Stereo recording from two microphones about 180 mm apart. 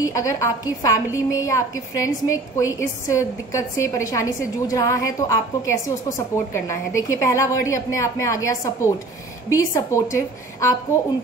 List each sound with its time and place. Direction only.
0.0 s a woman's voice: 20° left (ahead or behind)